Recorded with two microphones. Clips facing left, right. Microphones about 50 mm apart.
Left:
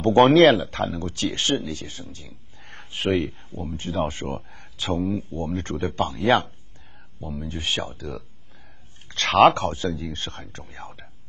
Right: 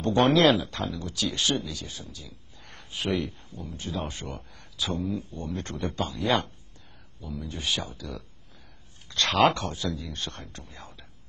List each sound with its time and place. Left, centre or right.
0.0 s speech: left